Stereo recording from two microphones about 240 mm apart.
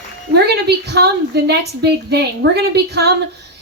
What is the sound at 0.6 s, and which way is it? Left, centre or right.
Speech, right.